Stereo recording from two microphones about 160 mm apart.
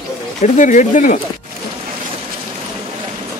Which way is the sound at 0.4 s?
50° left (ahead or behind).